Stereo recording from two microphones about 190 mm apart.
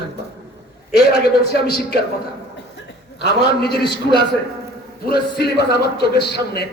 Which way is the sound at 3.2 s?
60° left (ahead or behind).